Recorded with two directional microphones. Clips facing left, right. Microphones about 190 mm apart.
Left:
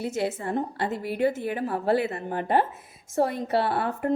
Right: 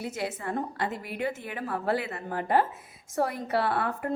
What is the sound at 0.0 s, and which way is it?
A woman's voice, 25° left (ahead or behind).